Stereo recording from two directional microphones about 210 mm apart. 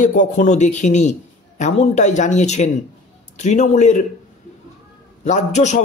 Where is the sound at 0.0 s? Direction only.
40° left (ahead or behind).